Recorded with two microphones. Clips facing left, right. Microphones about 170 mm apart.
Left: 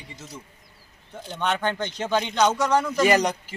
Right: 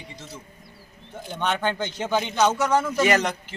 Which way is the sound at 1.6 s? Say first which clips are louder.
Even; 10° right (ahead or behind).